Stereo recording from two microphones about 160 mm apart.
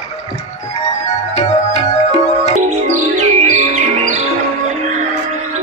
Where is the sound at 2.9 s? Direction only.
50° right (ahead or behind).